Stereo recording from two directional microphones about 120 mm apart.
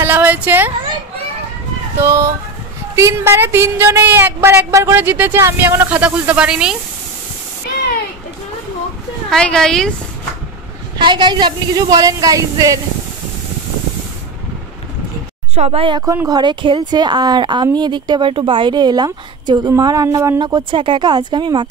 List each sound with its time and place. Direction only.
0.0 s a sound: 15° right (ahead or behind)
2.0 s a sound: 25° right (ahead or behind)
3.0 s a woman's voice: 20° right (ahead or behind); by 6.8 s 5° right (ahead or behind)
9.3 s speech: 5° left (ahead or behind)
11.0 s speech: 40° right (ahead or behind)
15.5 s speech: 55° right (ahead or behind)
16.3 s speech: 35° right (ahead or behind)